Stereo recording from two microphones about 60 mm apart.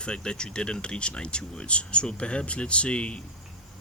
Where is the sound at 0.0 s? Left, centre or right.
Centre.